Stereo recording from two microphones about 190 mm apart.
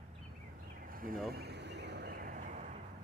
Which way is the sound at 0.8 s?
50° right (ahead or behind).